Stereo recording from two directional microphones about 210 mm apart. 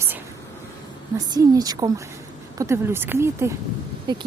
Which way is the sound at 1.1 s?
15° right (ahead or behind).